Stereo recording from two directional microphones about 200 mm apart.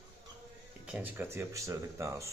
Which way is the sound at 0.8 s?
10° right (ahead or behind).